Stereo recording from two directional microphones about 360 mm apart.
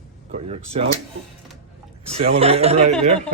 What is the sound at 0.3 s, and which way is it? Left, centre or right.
Speech, centre.